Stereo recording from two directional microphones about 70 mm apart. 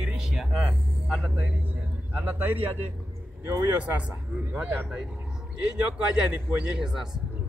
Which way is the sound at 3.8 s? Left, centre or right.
Centre.